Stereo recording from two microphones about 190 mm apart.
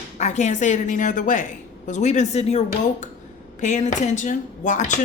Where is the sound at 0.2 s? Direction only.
40° left (ahead or behind).